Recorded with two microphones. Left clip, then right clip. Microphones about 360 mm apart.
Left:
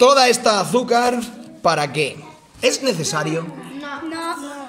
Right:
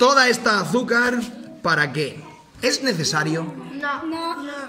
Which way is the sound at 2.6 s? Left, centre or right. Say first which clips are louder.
Left 2 dB; centre.